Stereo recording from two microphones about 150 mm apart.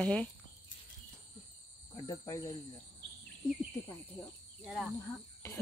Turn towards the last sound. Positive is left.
turn(degrees=0)  # may be behind; listen again after turning